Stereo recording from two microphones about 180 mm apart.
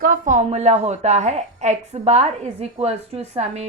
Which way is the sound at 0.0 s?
50° right (ahead or behind).